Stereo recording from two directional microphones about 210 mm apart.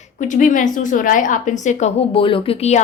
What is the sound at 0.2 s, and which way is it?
A woman's voice, 35° left (ahead or behind).